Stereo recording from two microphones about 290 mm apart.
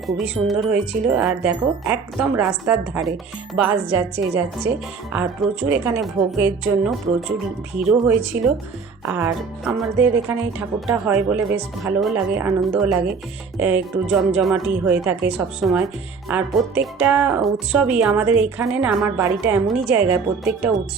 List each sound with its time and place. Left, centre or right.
0.2 s speech: centre
5.1 s speech: centre